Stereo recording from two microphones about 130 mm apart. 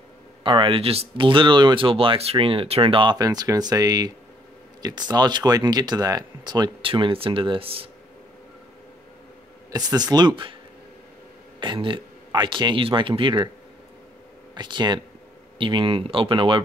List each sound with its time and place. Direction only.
0.4 s speech: 40° right (ahead or behind)
9.7 s speech: 30° right (ahead or behind)
11.6 s speech: 40° right (ahead or behind)
14.5 s speech: 35° right (ahead or behind)